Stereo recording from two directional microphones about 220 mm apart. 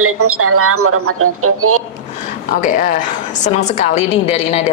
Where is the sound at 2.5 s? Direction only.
35° left (ahead or behind).